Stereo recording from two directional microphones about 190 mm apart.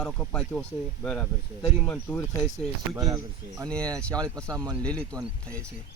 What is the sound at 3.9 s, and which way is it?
A man's voice, 5° left (ahead or behind).